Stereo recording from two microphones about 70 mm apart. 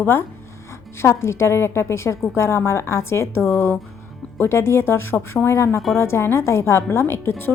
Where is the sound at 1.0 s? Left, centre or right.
Left.